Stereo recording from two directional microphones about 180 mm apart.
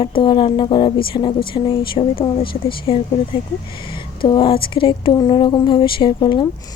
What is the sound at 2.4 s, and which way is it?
Speech, 55° left (ahead or behind).